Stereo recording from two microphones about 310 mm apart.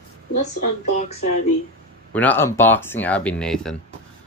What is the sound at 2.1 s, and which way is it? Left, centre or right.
Speech, centre.